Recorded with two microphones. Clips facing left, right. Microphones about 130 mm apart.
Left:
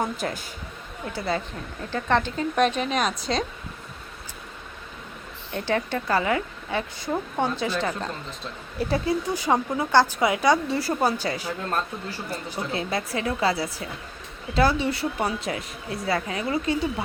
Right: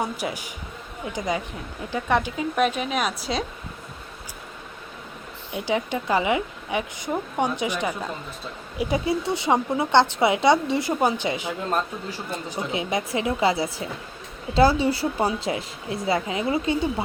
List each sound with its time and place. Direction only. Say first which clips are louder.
0.0 s speech: even; 10° right (ahead or behind)
5.5 s speech: right 1 dB; 10° right (ahead or behind)
9.0 s a woman's voice: right 1 dB; 25° right (ahead or behind)